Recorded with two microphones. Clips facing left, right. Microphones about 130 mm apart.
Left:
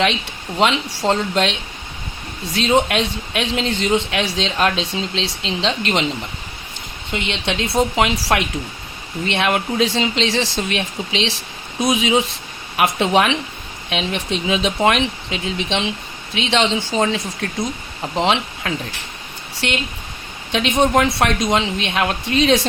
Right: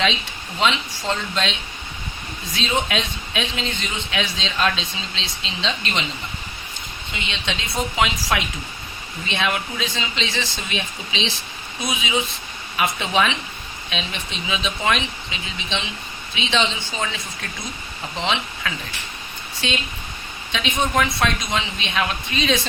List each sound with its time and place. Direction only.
0.6 s a man's voice: 60° left (ahead or behind)
2.6 s a man's voice: 60° left (ahead or behind)
7.1 s a man's voice: 65° left (ahead or behind)
12.7 s a man's voice: 65° left (ahead or behind); by 17.0 s 85° left
18.2 s speech: 50° left (ahead or behind)
19.6 s a man's voice: 65° left (ahead or behind)